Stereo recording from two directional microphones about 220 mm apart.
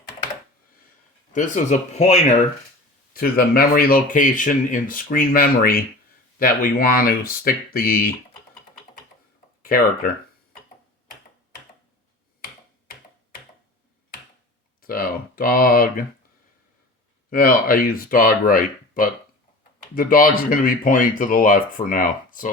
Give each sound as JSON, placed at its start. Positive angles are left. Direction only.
{"t": 1.3, "sound": "speech", "side_deg": 35}
{"t": 3.1, "sound": "speech", "side_deg": 40}
{"t": 9.6, "sound": "speech", "side_deg": 40}
{"t": 14.8, "sound": "speech", "side_deg": 40}
{"t": 17.2, "sound": "speech", "side_deg": 40}